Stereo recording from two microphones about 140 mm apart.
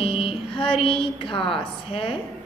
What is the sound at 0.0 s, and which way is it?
A woman's voice, 40° left (ahead or behind).